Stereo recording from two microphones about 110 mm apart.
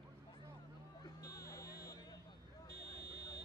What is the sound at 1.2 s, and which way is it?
Vehicle, 30° left (ahead or behind).